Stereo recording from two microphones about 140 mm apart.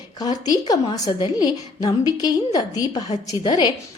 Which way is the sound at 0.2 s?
25° left (ahead or behind).